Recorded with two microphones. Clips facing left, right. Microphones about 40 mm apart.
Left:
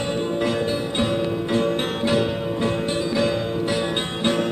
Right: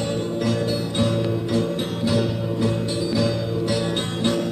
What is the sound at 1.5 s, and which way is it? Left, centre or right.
Music, left.